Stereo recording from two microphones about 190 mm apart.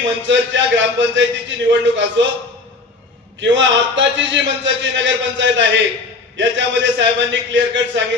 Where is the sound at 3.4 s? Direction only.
75° right (ahead or behind).